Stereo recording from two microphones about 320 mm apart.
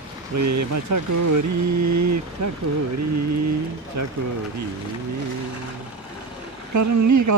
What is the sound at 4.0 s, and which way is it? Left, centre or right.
Speech, right.